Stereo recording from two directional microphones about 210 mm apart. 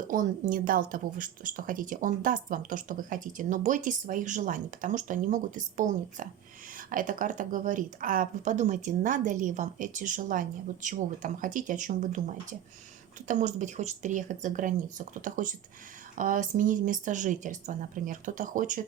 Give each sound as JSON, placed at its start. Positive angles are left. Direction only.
{"t": 0.1, "sound": "speech", "side_deg": -40}